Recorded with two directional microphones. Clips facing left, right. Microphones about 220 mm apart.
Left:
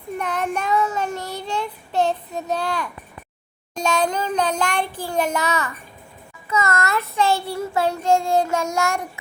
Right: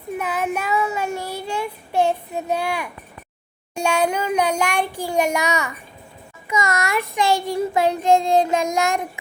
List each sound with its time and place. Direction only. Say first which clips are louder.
0.2 s child singing: even; 5° right (ahead or behind)